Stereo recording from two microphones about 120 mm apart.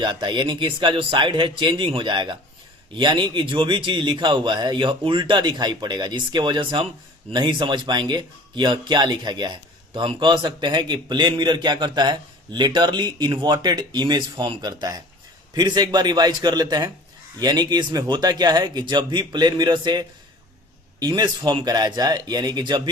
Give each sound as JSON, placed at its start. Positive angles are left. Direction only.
{"t": 0.0, "sound": "a man's voice", "side_deg": -40}